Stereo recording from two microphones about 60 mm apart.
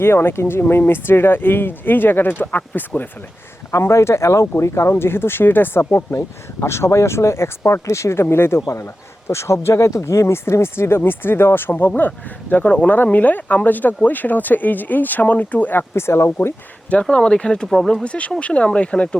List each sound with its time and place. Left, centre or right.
0.0 s speech: left
3.7 s speech: left
16.9 s speech: centre
17.7 s speech: centre
18.0 s speech: centre